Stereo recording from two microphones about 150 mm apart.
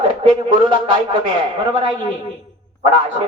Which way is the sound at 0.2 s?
35° right (ahead or behind).